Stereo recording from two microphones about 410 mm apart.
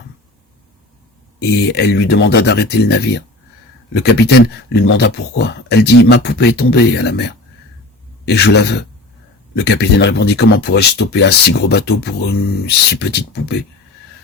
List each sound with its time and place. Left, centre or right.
1.4 s speech: left